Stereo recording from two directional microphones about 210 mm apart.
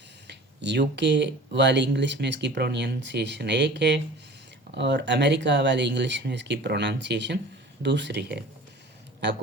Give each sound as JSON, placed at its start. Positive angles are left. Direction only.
{"t": 0.3, "sound": "speech", "side_deg": -55}